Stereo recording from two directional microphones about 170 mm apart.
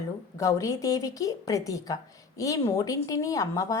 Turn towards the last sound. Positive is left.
turn(degrees=20)  # may be behind; listen again after turning